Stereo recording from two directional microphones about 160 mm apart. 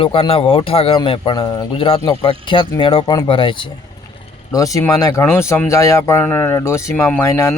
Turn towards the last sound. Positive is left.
turn(degrees=15)  # may be behind; listen again after turning